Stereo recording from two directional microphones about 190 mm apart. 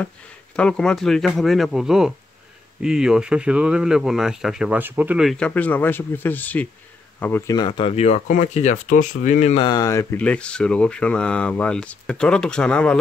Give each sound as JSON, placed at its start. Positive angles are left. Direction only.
{"t": 0.6, "sound": "speech", "side_deg": 5}
{"t": 9.6, "sound": "speech", "side_deg": 20}